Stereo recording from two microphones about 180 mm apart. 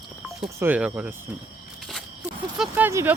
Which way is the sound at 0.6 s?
10° right (ahead or behind).